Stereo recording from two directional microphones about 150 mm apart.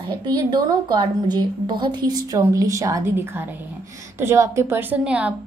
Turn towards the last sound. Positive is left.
turn(degrees=-10)  # may be behind; listen again after turning